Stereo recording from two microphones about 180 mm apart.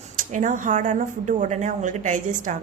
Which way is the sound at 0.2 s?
45° right (ahead or behind).